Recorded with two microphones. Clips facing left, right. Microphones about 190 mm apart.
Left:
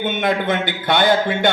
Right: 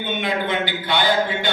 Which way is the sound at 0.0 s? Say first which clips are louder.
Left 4 dB; 50° left (ahead or behind).